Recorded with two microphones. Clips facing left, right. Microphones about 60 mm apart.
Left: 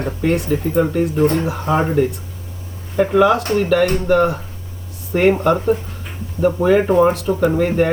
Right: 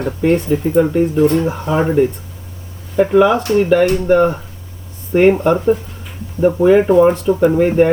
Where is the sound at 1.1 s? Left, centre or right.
Left.